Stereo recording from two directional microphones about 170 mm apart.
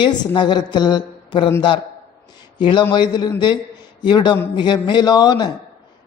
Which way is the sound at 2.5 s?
30° left (ahead or behind).